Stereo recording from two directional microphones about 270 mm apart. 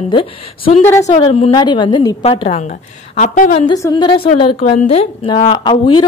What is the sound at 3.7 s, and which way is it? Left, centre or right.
A woman's voice, centre.